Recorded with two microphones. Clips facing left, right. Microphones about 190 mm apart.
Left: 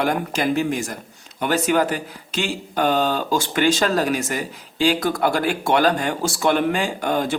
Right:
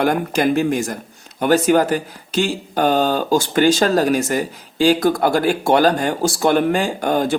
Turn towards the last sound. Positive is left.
turn(degrees=-40)  # may be behind; listen again after turning